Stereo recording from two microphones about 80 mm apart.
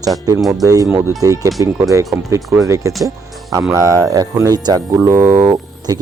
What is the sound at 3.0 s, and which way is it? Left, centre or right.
Music, right.